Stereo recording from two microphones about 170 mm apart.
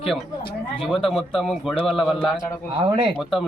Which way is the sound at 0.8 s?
Centre (ahead or behind).